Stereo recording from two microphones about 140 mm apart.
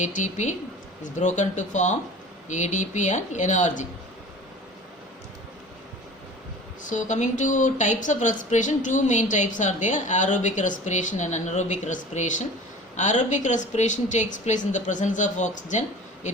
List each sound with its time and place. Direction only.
0.0 s speech: 60° left (ahead or behind)
6.9 s speech: 60° left (ahead or behind)